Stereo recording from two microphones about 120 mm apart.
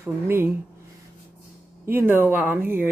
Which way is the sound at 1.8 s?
20° right (ahead or behind).